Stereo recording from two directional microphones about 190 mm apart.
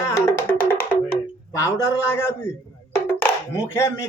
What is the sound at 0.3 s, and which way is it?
Music, 15° left (ahead or behind).